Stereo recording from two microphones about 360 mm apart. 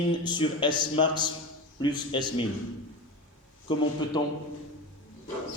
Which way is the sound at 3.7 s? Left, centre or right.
Centre.